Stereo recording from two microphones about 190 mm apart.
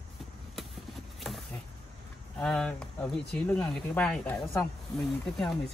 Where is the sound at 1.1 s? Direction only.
Centre (ahead or behind).